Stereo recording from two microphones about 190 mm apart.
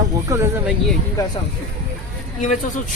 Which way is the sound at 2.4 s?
40° left (ahead or behind).